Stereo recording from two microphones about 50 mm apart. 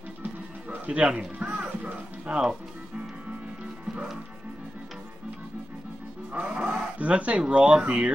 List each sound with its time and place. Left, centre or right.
0.2 s music: right
6.3 s speech: right